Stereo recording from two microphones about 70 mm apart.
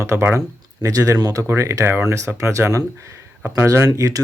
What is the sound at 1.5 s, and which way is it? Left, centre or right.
Speech, right.